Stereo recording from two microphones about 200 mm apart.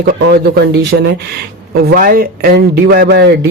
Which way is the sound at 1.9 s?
45° right (ahead or behind).